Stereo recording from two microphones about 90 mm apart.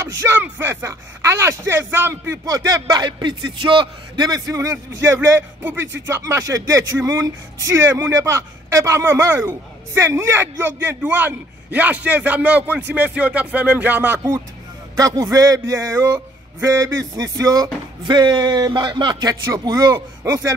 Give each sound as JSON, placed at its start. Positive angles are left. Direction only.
{"t": 0.2, "sound": "speech", "side_deg": -25}
{"t": 1.7, "sound": "speech", "side_deg": -25}
{"t": 2.5, "sound": "a man's voice", "side_deg": -45}
{"t": 15.0, "sound": "a man's voice", "side_deg": -45}